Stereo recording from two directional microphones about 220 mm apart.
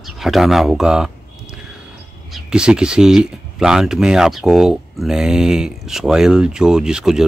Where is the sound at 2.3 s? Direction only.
5° right (ahead or behind).